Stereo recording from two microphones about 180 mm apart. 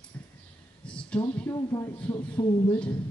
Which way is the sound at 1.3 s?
10° left (ahead or behind).